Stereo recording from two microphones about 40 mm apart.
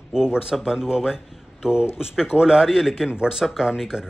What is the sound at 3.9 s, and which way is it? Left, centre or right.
Speech, right.